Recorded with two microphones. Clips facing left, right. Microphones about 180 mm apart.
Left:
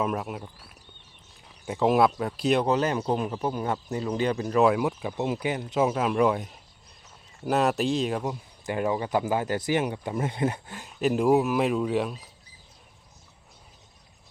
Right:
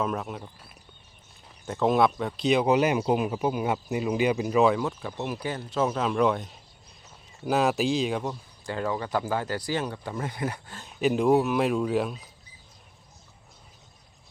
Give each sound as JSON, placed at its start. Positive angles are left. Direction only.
{"t": 0.0, "sound": "speech", "side_deg": 5}
{"t": 2.6, "sound": "speech", "side_deg": -10}
{"t": 4.8, "sound": "speech", "side_deg": 15}
{"t": 5.9, "sound": "speech", "side_deg": 5}
{"t": 10.8, "sound": "speech", "side_deg": 5}